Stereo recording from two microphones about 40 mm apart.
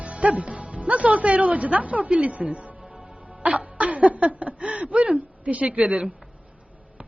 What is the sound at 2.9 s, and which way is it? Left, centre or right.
Music, centre.